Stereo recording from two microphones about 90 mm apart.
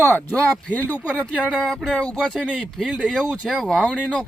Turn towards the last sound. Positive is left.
turn(degrees=15)  # may be behind; listen again after turning